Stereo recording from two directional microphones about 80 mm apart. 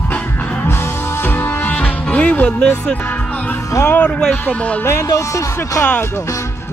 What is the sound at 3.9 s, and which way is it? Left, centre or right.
Speech, centre.